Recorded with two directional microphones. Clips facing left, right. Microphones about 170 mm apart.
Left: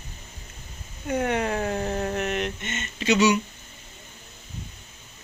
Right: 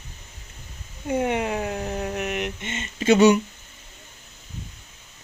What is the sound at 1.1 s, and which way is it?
Speech, 20° right (ahead or behind).